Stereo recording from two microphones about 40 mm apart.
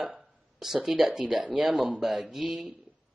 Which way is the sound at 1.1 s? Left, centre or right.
Centre.